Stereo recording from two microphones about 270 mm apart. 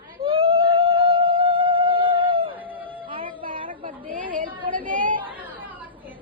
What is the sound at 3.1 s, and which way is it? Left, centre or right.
Music, centre.